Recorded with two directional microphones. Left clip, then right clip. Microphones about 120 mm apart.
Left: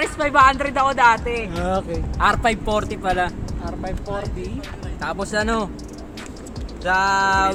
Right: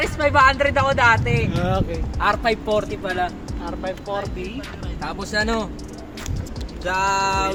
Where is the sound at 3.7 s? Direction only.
Centre (ahead or behind).